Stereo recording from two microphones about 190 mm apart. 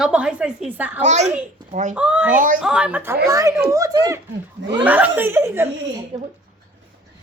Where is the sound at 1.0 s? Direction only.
35° right (ahead or behind).